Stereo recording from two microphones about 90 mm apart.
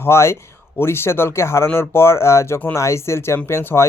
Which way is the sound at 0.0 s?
30° left (ahead or behind).